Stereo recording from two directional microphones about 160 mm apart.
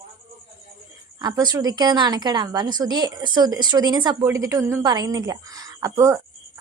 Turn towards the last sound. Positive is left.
turn(degrees=-20)  # may be behind; listen again after turning